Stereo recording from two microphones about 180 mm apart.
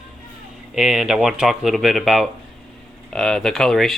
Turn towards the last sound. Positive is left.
turn(degrees=0)  # may be behind; listen again after turning